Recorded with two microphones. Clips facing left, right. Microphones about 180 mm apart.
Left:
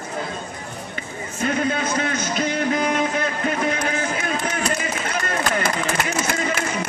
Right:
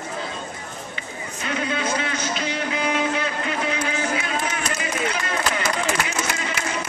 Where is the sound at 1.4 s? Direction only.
45° left (ahead or behind).